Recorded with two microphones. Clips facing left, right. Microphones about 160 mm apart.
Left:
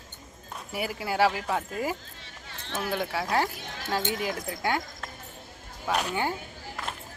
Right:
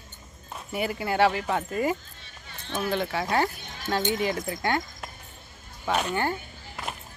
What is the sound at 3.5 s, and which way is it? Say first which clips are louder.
Music: even; 85° left.